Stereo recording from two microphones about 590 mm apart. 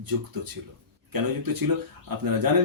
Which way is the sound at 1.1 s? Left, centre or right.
Right.